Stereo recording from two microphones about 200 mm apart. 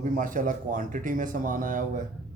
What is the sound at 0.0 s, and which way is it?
Speech, 40° right (ahead or behind).